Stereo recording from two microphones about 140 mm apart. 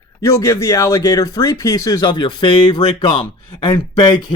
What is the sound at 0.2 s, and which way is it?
Speech, 20° left (ahead or behind).